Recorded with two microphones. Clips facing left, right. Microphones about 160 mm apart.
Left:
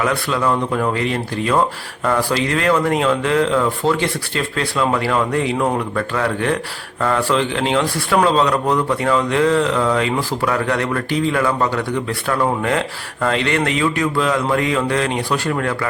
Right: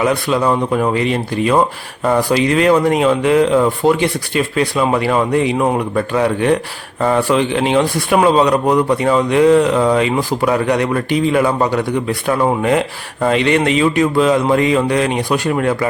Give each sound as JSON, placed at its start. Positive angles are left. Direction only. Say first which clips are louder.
{"t": 0.0, "sound": "a man's voice", "louder": "right 4 dB", "side_deg": -20}